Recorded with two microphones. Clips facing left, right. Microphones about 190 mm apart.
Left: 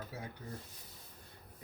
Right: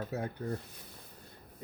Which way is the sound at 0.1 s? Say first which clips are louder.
Right 10 dB; 55° right (ahead or behind).